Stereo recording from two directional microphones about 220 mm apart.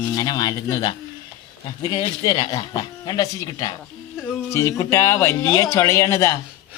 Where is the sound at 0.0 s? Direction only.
15° left (ahead or behind).